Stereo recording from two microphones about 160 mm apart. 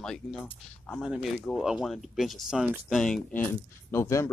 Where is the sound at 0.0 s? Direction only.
5° left (ahead or behind).